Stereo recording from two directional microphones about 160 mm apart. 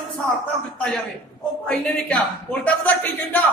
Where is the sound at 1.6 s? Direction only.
10° left (ahead or behind).